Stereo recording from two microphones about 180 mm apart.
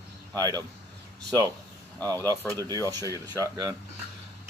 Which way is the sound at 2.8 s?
20° right (ahead or behind).